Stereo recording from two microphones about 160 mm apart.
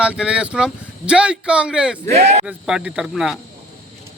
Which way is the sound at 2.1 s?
45° right (ahead or behind).